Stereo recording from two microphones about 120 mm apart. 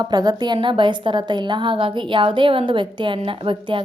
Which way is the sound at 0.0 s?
35° right (ahead or behind).